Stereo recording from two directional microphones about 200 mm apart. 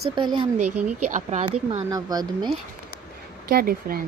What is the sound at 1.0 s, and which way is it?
Speech, 35° right (ahead or behind).